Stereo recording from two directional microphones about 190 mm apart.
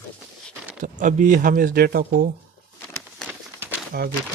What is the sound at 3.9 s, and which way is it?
Speech, 55° right (ahead or behind).